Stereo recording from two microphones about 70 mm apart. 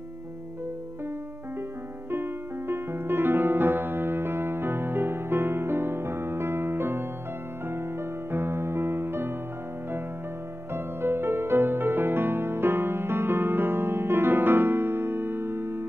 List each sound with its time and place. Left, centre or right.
2.0 s music: right
10.7 s music: right